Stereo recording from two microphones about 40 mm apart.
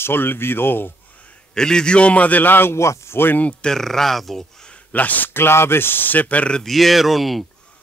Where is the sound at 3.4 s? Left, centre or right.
Left.